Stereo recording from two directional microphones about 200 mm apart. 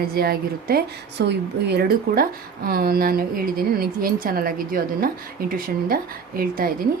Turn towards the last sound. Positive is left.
turn(degrees=-45)  # may be behind; listen again after turning